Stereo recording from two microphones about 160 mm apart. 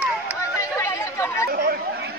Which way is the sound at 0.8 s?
15° left (ahead or behind).